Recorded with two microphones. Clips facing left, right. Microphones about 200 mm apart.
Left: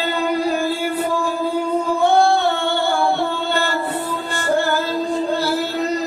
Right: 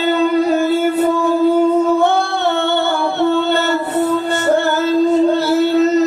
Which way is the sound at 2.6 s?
20° right (ahead or behind).